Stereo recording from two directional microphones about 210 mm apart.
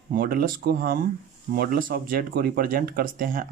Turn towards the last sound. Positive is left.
turn(degrees=-40)  # may be behind; listen again after turning